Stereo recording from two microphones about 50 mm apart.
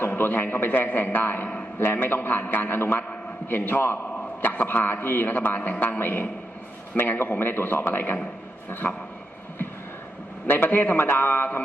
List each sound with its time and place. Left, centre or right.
0.2 s a man's voice: left
10.4 s a man's voice: left